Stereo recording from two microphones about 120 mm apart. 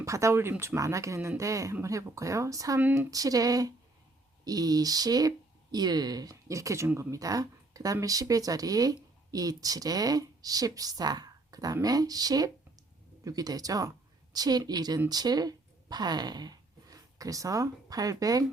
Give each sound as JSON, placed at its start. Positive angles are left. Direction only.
{"t": 0.0, "sound": "speech", "side_deg": -25}